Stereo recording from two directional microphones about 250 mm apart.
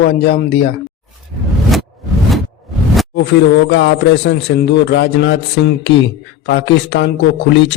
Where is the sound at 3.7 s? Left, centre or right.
Left.